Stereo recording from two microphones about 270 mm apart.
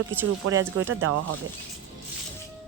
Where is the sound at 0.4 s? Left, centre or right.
Right.